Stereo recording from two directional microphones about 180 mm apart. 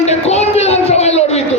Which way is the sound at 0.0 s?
35° left (ahead or behind).